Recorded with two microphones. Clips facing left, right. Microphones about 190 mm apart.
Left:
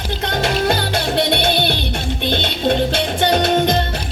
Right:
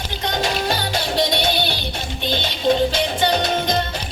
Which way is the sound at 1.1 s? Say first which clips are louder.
Left 2 dB; 55° left (ahead or behind).